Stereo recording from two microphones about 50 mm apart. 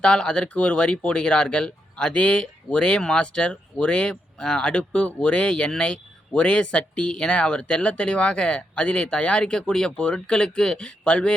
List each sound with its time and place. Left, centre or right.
0.0 s speech: centre